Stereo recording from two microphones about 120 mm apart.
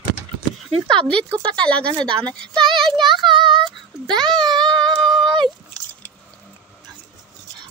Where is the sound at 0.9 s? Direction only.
5° left (ahead or behind).